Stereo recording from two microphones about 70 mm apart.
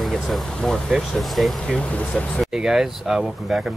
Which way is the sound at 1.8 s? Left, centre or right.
Centre.